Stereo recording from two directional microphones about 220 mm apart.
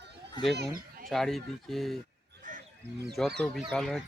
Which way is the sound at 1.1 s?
Centre (ahead or behind).